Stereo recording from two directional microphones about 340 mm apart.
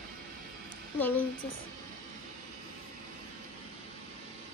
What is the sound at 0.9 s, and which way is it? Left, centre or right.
Speech, centre.